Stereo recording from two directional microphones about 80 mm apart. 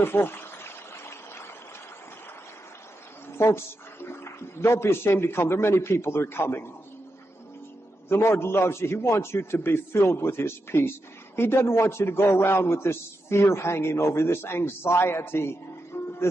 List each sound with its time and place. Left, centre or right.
0.0 s a sound: left
3.3 s speech: left
8.1 s a man's voice: left